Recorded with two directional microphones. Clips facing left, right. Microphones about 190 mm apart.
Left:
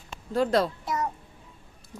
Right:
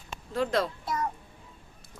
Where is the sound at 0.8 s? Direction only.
20° left (ahead or behind).